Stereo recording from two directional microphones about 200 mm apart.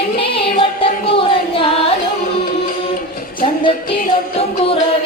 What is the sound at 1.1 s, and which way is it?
Singing, 25° left (ahead or behind).